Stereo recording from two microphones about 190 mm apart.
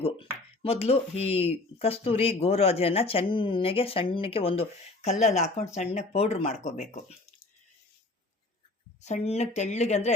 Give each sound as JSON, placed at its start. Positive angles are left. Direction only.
{"t": 0.6, "sound": "speech", "side_deg": 30}
{"t": 9.0, "sound": "speech", "side_deg": 35}